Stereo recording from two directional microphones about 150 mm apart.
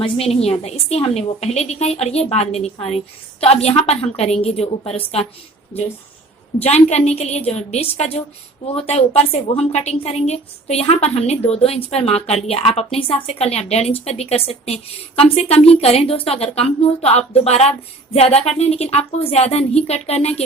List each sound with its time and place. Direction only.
0.0 s a woman's voice: 40° left (ahead or behind)
6.6 s a woman's voice: 45° left (ahead or behind)